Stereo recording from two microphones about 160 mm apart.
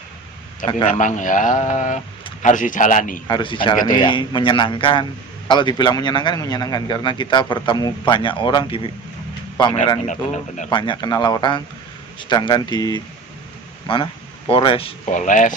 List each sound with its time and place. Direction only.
0.9 s a man's voice: 50° left (ahead or behind)
3.2 s a man's voice: 30° left (ahead or behind)
10.1 s a man's voice: 50° left (ahead or behind)
10.7 s a man's voice: 30° left (ahead or behind)
15.1 s a man's voice: 50° left (ahead or behind)